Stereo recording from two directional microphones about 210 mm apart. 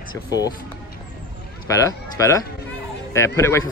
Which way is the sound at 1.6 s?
15° left (ahead or behind).